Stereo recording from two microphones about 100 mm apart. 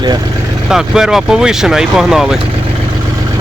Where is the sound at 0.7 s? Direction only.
5° right (ahead or behind).